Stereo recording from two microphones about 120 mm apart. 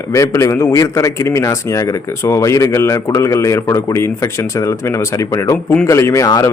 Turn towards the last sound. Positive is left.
turn(degrees=30)  # may be behind; listen again after turning